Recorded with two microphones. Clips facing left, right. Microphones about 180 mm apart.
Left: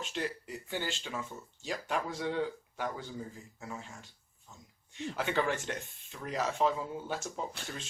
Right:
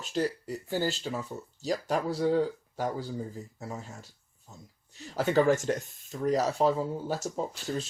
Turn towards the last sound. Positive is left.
turn(degrees=-40)  # may be behind; listen again after turning